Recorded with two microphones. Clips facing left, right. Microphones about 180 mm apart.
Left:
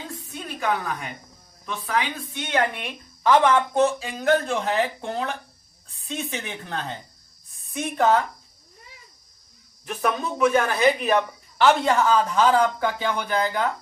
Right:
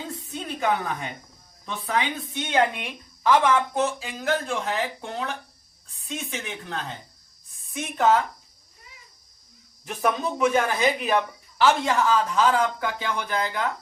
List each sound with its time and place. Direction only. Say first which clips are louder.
0.3 s a sound: right 2 dB; 20° right (ahead or behind)
1.6 s a woman's voice: even; 20° right (ahead or behind); by 8.2 s centre (ahead or behind)
9.8 s speech: even; 15° right (ahead or behind)
11.6 s speech: left 2 dB; centre (ahead or behind)